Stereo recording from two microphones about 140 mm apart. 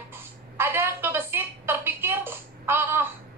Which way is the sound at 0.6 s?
15° right (ahead or behind).